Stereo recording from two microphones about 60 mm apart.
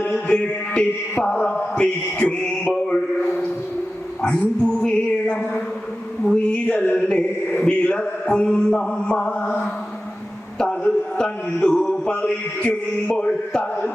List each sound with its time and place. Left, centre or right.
0.1 s mantra: centre
4.2 s a sound: centre
7.1 s music: left
7.6 s mantra: centre
10.6 s a sound: centre
13.1 s mantra: centre